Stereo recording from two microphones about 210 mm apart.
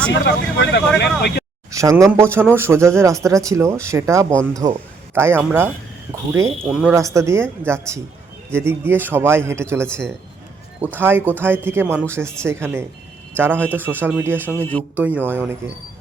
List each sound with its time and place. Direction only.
0.1 s speech: 55° left (ahead or behind)
1.7 s a man's voice: 15° right (ahead or behind)
14.5 s speech: 10° left (ahead or behind)
14.9 s a man's voice: 10° right (ahead or behind)